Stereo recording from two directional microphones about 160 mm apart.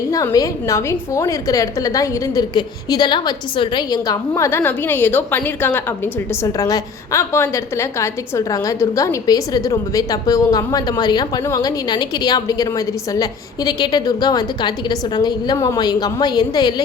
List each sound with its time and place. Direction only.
0.1 s a woman's voice: 20° left (ahead or behind)